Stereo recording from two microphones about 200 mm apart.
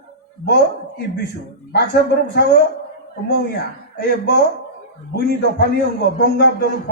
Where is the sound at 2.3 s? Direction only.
55° left (ahead or behind).